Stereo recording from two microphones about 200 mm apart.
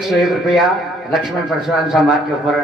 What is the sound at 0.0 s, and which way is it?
A man's voice, centre (ahead or behind).